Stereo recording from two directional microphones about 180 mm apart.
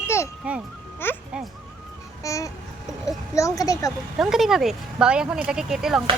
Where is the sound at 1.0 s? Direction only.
10° left (ahead or behind).